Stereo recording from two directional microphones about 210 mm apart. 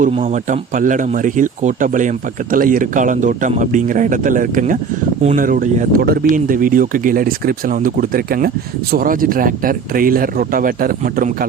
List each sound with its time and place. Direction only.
0.0 s speech: 35° right (ahead or behind)